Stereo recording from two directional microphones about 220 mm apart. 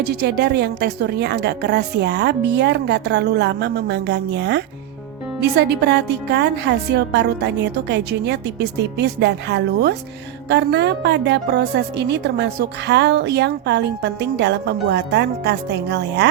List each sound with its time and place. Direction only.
0.0 s a woman's voice: 45° right (ahead or behind)